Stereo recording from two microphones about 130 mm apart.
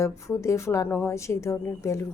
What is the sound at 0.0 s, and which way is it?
A woman's voice, 20° left (ahead or behind).